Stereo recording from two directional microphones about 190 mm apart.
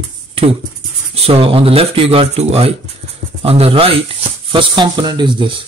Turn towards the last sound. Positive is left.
turn(degrees=-25)  # may be behind; listen again after turning